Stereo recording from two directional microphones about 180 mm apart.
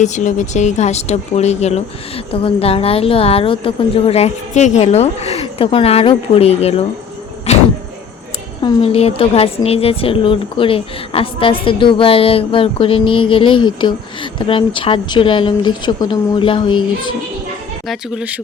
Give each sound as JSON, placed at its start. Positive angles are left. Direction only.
{"t": 0.0, "sound": "a woman's voice", "side_deg": 40}
{"t": 17.8, "sound": "speech", "side_deg": -5}